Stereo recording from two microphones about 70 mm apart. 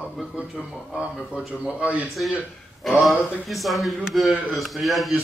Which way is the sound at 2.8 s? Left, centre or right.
Centre.